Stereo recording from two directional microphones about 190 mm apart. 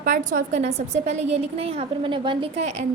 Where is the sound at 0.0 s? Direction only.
40° right (ahead or behind).